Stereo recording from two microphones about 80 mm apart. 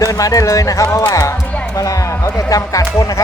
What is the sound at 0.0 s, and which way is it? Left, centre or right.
Speech, left.